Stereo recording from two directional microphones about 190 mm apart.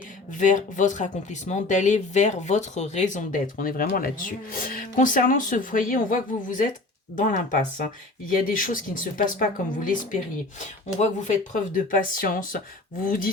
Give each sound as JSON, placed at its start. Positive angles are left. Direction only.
{"t": 0.3, "sound": "speech", "side_deg": 40}